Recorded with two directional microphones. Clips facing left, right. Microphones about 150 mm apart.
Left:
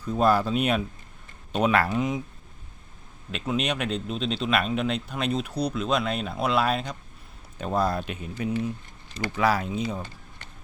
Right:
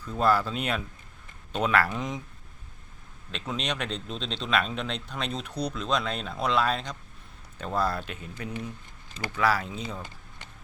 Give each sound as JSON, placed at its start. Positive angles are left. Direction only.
{"t": 0.0, "sound": "speech", "side_deg": 15}
{"t": 1.9, "sound": "speech", "side_deg": 5}
{"t": 3.3, "sound": "speech", "side_deg": 10}